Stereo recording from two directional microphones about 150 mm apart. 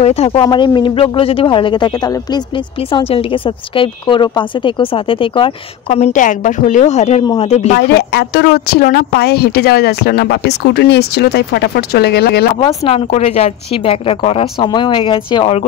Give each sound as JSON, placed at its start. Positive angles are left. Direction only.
{"t": 0.0, "sound": "speech", "side_deg": 45}
{"t": 7.9, "sound": "speech", "side_deg": 90}
{"t": 12.5, "sound": "speech", "side_deg": 40}